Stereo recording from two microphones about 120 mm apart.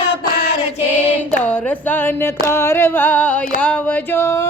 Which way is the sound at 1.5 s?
15° left (ahead or behind).